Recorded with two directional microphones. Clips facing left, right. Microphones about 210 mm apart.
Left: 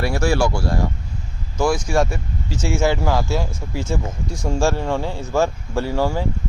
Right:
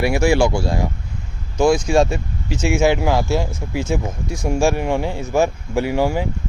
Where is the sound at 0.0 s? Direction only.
15° right (ahead or behind).